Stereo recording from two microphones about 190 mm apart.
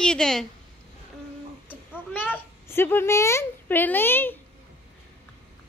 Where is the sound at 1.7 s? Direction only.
10° left (ahead or behind).